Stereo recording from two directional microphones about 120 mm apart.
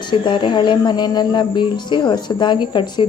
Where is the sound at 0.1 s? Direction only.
40° left (ahead or behind).